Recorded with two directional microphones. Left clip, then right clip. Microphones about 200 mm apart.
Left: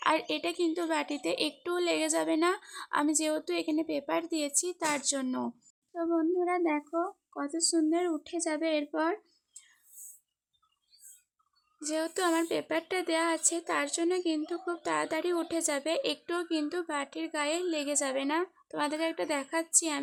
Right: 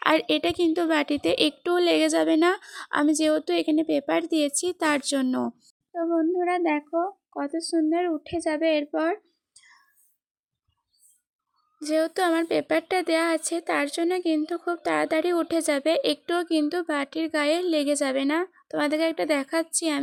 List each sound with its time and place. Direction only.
0.0 s a woman's voice: 30° right (ahead or behind)
11.8 s a woman's voice: 20° right (ahead or behind)